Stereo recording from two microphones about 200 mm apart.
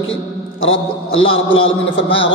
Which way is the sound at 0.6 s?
80° left.